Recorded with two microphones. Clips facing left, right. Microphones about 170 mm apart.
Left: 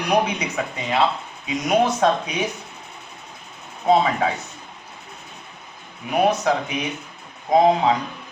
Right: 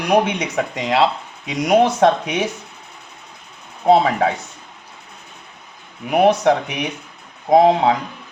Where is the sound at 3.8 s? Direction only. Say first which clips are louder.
Right 4 dB; 65° right (ahead or behind).